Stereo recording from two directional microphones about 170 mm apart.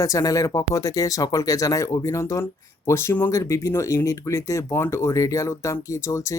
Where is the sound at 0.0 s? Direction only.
20° left (ahead or behind).